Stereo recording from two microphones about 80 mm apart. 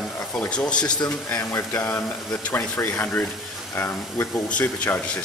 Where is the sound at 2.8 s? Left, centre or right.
Left.